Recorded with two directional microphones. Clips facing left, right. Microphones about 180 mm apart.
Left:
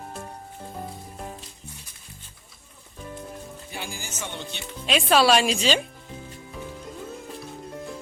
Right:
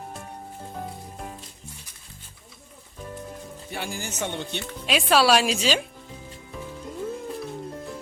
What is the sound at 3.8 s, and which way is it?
Speech, 60° right (ahead or behind).